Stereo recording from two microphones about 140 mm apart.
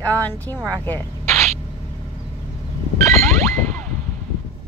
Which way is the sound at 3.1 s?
20° left (ahead or behind).